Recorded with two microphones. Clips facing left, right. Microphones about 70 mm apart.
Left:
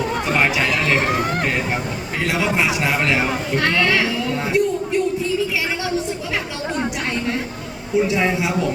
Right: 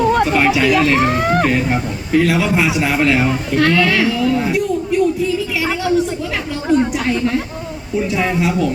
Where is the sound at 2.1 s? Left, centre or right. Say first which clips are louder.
Right 6 dB; centre.